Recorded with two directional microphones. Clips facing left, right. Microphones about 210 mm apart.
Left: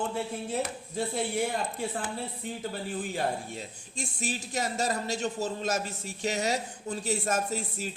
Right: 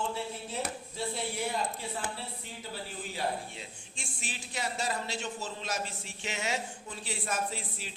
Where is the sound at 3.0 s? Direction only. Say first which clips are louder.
Left 2 dB; 50° left (ahead or behind).